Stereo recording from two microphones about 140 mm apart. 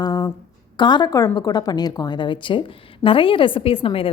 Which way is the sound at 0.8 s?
35° left (ahead or behind).